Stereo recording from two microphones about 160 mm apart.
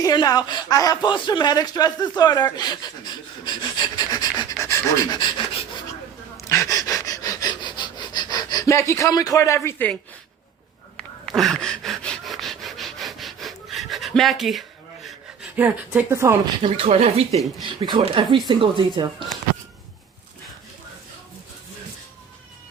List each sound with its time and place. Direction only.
0.0 s speech: 25° left (ahead or behind)
4.6 s pant: 20° left (ahead or behind)
6.5 s wheeze: 20° left (ahead or behind)
10.9 s pant: 5° left (ahead or behind)
15.5 s speech: 10° right (ahead or behind)
16.6 s speech: 35° right (ahead or behind)